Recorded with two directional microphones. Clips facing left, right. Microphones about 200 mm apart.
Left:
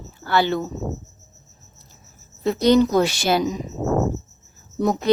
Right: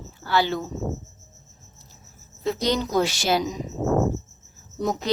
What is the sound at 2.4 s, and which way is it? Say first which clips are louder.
A woman's voice: left 8 dB; 55° left (ahead or behind).